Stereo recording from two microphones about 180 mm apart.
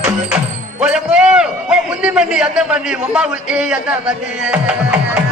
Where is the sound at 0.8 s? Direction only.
5° right (ahead or behind).